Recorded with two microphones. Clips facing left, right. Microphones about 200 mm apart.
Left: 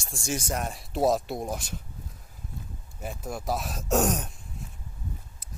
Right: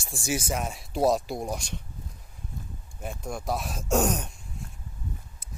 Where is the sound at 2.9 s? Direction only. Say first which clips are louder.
Even; 5° left (ahead or behind).